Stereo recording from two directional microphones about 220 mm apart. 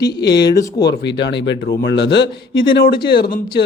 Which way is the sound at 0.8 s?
50° left (ahead or behind).